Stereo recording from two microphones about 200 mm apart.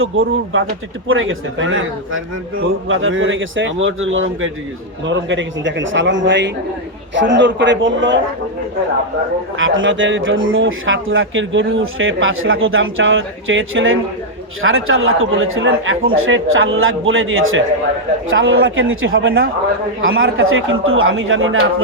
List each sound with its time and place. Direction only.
0.0 s a man's voice: 90° right
5.0 s speech: 65° right (ahead or behind)
9.6 s speech: 75° right (ahead or behind)
14.6 s a man's voice: 90° right